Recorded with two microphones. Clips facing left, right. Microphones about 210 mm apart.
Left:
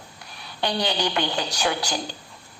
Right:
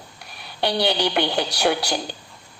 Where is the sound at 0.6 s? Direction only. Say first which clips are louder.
Right 3 dB; 65° right (ahead or behind).